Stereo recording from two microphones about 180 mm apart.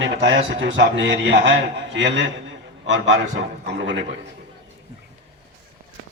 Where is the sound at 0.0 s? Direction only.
85° right.